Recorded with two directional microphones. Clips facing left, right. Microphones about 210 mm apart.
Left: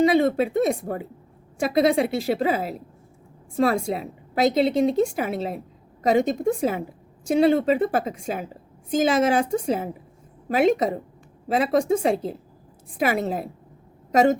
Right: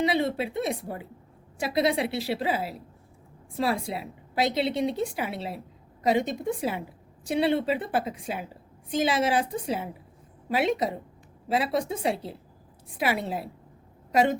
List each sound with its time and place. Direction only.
0.0 s a woman's voice: 45° left (ahead or behind)